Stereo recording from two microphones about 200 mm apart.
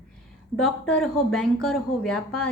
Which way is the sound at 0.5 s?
5° left (ahead or behind).